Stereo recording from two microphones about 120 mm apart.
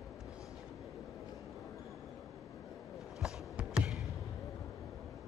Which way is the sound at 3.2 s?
5° right (ahead or behind).